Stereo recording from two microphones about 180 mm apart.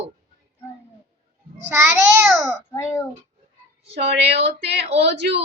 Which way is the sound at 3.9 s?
35° right (ahead or behind).